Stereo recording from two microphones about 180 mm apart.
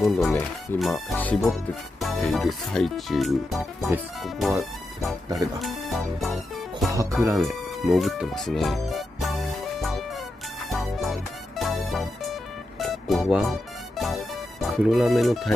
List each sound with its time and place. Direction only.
0.0 s speech: 5° left (ahead or behind)
6.9 s speech: 20° right (ahead or behind)
7.3 s music: centre (ahead or behind)